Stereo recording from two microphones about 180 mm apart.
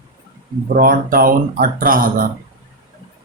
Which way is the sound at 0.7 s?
50° right (ahead or behind).